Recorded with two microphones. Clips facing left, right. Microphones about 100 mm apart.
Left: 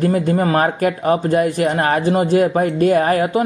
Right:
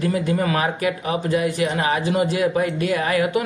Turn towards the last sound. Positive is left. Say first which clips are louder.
# left 5 dB
turn(degrees=40)  # may be behind; listen again after turning